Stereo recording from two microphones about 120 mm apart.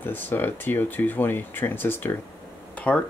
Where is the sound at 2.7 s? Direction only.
10° left (ahead or behind).